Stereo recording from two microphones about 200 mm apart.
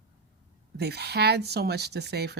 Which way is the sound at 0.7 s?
55° right (ahead or behind).